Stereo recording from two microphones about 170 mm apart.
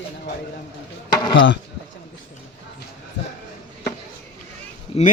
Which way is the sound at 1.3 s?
90° left.